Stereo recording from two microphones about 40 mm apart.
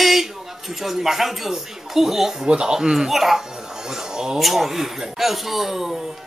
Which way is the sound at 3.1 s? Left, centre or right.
Centre.